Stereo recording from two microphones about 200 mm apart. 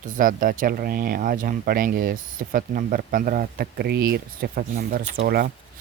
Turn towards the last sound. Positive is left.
turn(degrees=-50)  # may be behind; listen again after turning